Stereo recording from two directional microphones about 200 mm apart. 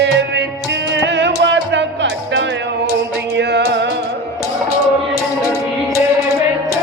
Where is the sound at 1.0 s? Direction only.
60° right (ahead or behind).